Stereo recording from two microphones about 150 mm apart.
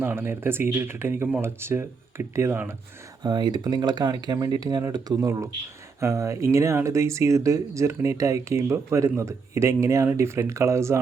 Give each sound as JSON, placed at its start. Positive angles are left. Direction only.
{"t": 0.0, "sound": "speech", "side_deg": -15}
{"t": 3.2, "sound": "speech", "side_deg": -30}